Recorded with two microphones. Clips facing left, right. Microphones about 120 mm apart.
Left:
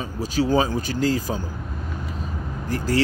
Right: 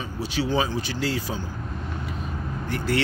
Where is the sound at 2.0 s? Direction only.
40° left (ahead or behind).